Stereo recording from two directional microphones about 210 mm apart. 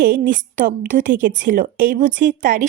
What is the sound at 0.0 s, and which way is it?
A woman's voice, 40° right (ahead or behind).